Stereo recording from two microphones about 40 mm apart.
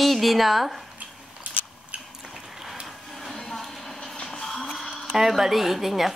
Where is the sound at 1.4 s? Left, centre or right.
Right.